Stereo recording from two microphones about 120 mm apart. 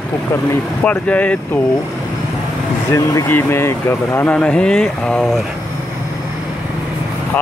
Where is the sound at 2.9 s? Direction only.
20° left (ahead or behind).